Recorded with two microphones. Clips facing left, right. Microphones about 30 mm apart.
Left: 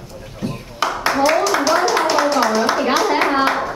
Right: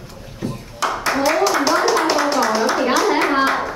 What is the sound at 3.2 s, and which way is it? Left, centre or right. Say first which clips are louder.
Clapping: even; centre.